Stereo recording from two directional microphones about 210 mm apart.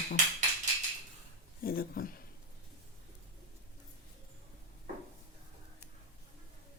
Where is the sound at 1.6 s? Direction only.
45° left (ahead or behind).